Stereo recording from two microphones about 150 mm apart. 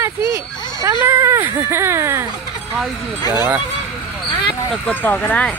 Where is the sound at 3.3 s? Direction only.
20° right (ahead or behind).